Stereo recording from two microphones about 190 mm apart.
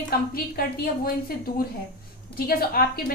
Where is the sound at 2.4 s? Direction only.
50° left (ahead or behind).